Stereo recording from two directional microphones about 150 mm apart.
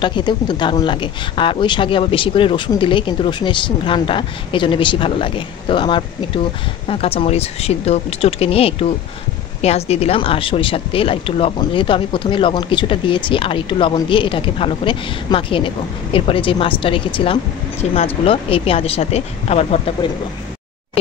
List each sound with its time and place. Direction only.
0.0 s speech: 30° left (ahead or behind)